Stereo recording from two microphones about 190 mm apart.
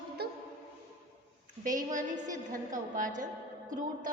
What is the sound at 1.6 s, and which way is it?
A woman's voice, 45° right (ahead or behind).